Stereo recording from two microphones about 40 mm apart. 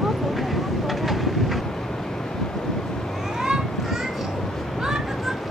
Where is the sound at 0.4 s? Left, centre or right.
Centre.